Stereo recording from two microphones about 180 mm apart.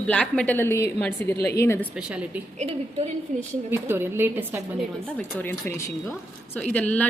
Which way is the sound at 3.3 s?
45° right (ahead or behind).